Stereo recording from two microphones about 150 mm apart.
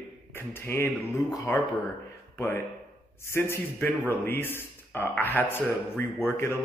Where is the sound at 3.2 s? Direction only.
15° left (ahead or behind).